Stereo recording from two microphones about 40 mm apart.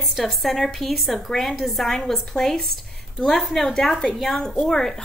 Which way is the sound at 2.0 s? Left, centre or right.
Centre.